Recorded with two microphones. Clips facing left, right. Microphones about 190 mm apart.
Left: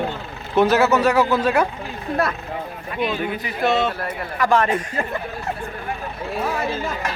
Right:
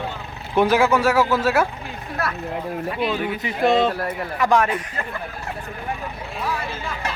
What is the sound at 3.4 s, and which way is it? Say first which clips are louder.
Speech: right 3 dB; 30° right (ahead or behind).